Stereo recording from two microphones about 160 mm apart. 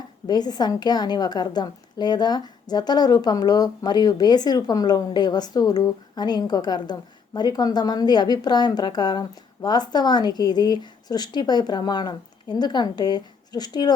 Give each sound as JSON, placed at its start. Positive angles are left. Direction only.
{"t": 0.3, "sound": "a woman's voice", "side_deg": 25}